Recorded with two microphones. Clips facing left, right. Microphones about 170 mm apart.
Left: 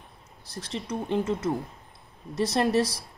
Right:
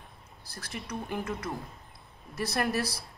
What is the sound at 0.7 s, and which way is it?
Speech, 25° left (ahead or behind).